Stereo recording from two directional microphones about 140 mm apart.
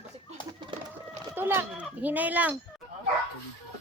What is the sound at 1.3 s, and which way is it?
Speech, 15° right (ahead or behind).